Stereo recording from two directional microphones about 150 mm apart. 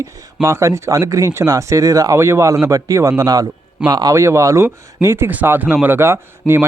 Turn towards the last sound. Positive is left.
turn(degrees=-15)  # may be behind; listen again after turning